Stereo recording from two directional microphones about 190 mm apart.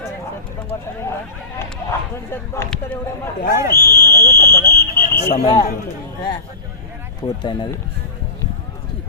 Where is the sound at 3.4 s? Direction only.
50° left (ahead or behind).